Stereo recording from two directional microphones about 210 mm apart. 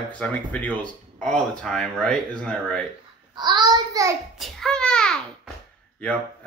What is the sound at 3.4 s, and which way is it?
Speech, 20° right (ahead or behind).